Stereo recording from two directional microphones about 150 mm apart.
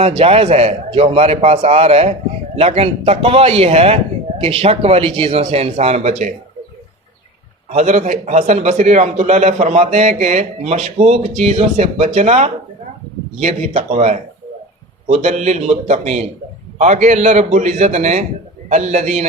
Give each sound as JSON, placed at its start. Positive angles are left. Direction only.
{"t": 0.0, "sound": "a man's voice", "side_deg": -40}
{"t": 7.7, "sound": "a man's voice", "side_deg": -50}